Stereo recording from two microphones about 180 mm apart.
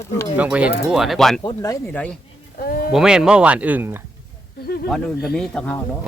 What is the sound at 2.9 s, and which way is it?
Speech, 5° right (ahead or behind).